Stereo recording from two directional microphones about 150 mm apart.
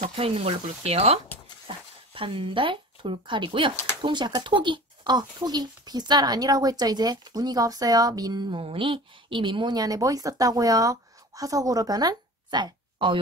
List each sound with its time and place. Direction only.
0.1 s speech: 40° right (ahead or behind)